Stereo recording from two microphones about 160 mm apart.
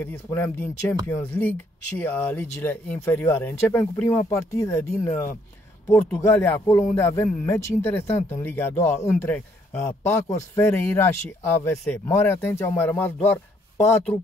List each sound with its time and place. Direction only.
0.0 s speech: 15° left (ahead or behind)